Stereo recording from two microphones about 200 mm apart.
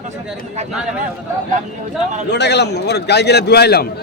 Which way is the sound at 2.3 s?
55° left (ahead or behind).